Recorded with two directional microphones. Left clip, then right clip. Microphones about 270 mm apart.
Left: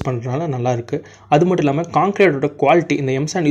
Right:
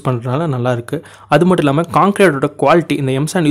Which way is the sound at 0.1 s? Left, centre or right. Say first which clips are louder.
Right 4 dB; centre.